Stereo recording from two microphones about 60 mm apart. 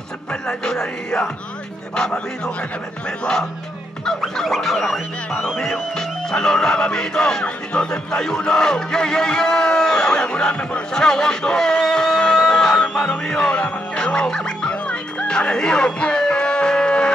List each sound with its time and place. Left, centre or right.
0.3 s speech: centre
2.0 s music: centre
4.0 s music: centre